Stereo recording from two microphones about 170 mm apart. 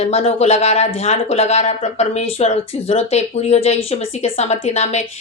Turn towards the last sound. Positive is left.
turn(degrees=40)  # may be behind; listen again after turning